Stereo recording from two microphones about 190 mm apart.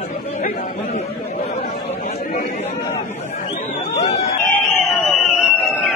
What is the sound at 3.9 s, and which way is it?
Chatter, 35° left (ahead or behind).